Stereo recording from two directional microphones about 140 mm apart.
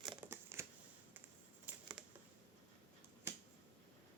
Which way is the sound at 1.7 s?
10° right (ahead or behind).